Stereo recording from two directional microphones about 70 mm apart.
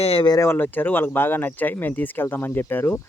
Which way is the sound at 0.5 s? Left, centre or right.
Left.